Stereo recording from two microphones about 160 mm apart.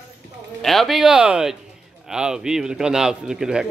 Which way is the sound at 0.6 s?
Centre (ahead or behind).